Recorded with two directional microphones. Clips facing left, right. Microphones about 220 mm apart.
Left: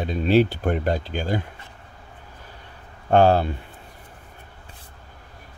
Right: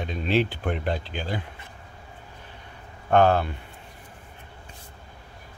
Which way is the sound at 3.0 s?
30° left (ahead or behind).